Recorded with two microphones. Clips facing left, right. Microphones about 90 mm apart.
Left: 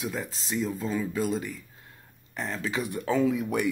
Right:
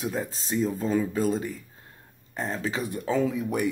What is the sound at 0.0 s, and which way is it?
Speech, 40° right (ahead or behind).